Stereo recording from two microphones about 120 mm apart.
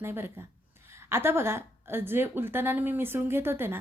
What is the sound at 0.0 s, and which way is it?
Speech, 20° right (ahead or behind).